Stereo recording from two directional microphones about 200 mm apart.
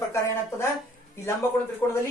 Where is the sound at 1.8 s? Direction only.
15° left (ahead or behind).